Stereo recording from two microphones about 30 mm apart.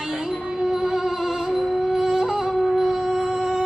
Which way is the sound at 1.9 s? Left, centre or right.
Centre.